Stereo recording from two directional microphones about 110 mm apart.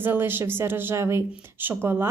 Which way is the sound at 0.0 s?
20° right (ahead or behind).